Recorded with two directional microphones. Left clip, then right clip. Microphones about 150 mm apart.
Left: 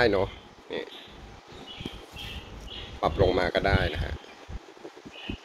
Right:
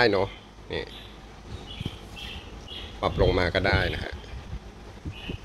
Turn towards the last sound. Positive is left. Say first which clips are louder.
# right 1 dB
turn(degrees=0)  # may be behind; listen again after turning